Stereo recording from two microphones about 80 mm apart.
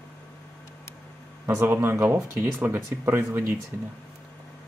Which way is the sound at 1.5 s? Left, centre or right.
Right.